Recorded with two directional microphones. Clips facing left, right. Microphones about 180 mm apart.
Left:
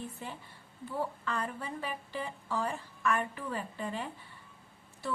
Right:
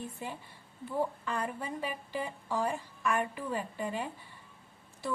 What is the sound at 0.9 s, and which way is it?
A woman's voice, 15° right (ahead or behind).